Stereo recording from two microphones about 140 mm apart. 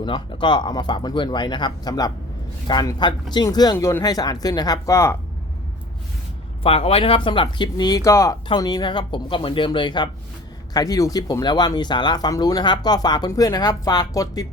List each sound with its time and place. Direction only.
0.0 s speech: 35° left (ahead or behind)
6.6 s speech: 45° left (ahead or behind); by 14.4 s 25° left (ahead or behind)